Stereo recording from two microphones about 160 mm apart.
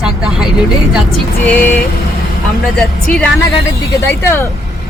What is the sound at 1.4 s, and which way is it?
Speech, 10° left (ahead or behind).